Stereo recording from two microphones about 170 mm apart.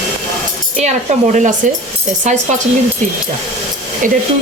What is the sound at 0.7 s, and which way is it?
Speech, 45° right (ahead or behind).